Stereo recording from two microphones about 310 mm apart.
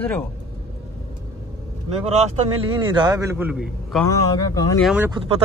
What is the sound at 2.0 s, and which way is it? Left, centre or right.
A man's voice, right.